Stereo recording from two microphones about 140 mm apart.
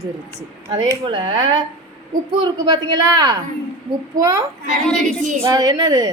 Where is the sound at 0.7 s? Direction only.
30° right (ahead or behind).